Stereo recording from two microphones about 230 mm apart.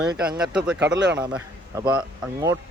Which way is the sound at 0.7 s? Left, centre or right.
Right.